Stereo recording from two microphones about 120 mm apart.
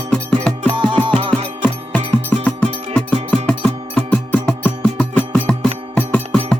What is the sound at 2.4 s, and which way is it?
Music, 15° left (ahead or behind).